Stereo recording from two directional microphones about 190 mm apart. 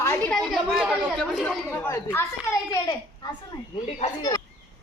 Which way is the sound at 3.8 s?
35° left (ahead or behind).